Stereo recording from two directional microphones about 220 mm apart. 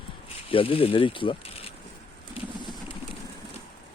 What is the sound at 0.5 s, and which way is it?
Speech, 25° left (ahead or behind).